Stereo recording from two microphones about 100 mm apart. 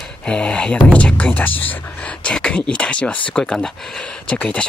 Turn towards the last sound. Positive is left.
turn(degrees=10)  # may be behind; listen again after turning